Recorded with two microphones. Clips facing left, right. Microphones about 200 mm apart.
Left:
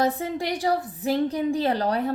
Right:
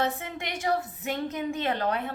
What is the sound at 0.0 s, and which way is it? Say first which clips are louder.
A woman's voice: left 6 dB; 35° left (ahead or behind).